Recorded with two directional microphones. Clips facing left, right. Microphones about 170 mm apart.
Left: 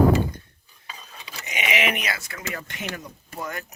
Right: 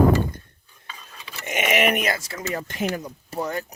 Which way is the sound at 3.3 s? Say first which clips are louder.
Right 6 dB; 30° right (ahead or behind).